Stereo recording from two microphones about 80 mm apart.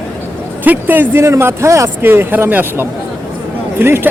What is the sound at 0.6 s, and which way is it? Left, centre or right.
A man's voice, right.